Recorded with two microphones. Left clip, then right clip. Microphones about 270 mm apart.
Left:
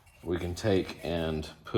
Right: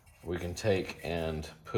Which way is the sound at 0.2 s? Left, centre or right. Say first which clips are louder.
Left 3 dB; left.